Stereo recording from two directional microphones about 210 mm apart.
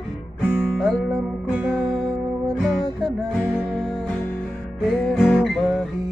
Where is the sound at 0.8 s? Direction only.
5° left (ahead or behind).